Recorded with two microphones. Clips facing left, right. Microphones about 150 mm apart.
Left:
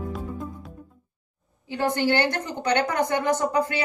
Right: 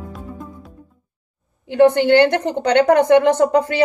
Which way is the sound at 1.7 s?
65° right (ahead or behind).